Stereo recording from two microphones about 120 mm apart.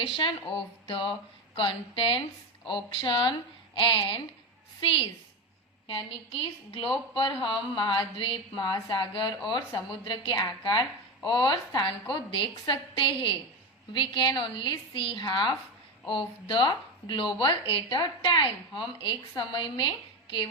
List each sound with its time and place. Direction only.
0.5 s a woman's voice: 45° left (ahead or behind)
5.9 s a woman's voice: 50° left (ahead or behind)